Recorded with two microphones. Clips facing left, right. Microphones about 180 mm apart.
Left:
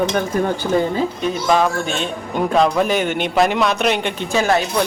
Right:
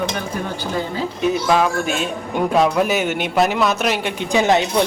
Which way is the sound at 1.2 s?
5° right (ahead or behind).